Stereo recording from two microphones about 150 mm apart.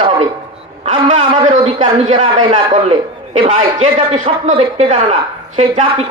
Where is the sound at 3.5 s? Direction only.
50° right (ahead or behind).